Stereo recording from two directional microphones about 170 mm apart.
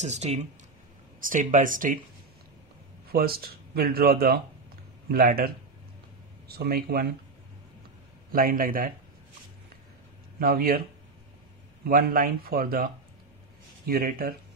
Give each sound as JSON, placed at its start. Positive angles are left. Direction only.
{"t": 0.0, "sound": "speech", "side_deg": -40}
{"t": 3.1, "sound": "speech", "side_deg": -60}
{"t": 8.3, "sound": "speech", "side_deg": -60}
{"t": 10.4, "sound": "speech", "side_deg": -60}
{"t": 11.8, "sound": "speech", "side_deg": -55}